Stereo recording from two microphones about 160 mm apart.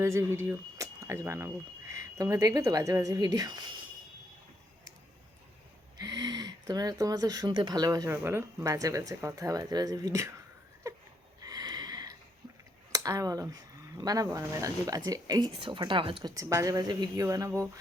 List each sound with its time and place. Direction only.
0.0 s speech: 15° right (ahead or behind)
6.0 s speech: 25° right (ahead or behind)
10.8 s a sound: 20° right (ahead or behind)
12.9 s speech: 20° right (ahead or behind)
16.3 s speech: 20° right (ahead or behind)